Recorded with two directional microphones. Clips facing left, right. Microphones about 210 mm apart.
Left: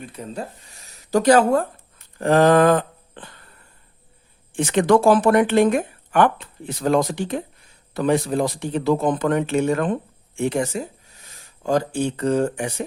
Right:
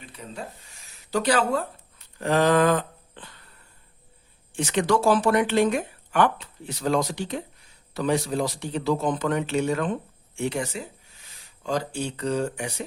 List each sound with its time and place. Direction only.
0.0 s speech: 45° left (ahead or behind)
2.1 s a sound: 50° left (ahead or behind)
4.5 s speech: 55° left (ahead or behind)